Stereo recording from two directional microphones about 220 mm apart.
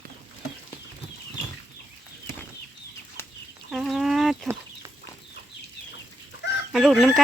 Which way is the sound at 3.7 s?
Centre (ahead or behind).